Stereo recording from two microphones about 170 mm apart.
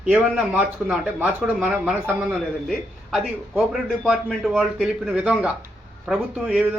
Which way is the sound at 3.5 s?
5° right (ahead or behind).